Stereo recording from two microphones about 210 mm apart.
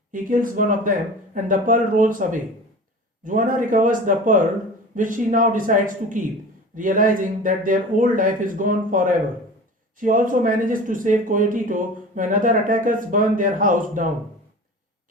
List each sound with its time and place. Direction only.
0.1 s speech: 40° right (ahead or behind)